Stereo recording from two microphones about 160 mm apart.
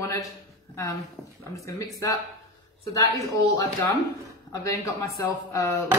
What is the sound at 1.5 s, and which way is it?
Speech, 20° left (ahead or behind).